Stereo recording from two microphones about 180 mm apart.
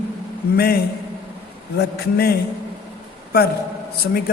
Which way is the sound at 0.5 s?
60° left (ahead or behind).